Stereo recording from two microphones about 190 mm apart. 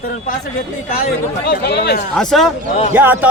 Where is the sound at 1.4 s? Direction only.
55° left (ahead or behind).